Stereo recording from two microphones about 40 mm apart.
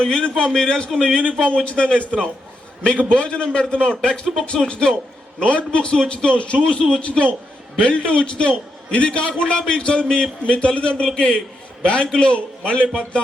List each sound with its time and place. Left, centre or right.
0.0 s a man's voice: left